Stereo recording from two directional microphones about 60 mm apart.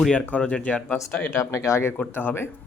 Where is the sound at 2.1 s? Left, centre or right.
Left.